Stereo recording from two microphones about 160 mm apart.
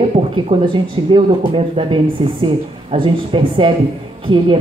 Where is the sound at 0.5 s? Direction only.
30° right (ahead or behind).